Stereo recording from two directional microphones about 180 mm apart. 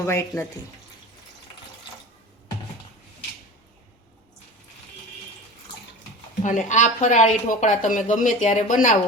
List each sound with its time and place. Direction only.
0.0 s speech: 15° left (ahead or behind)
6.4 s speech: 45° left (ahead or behind)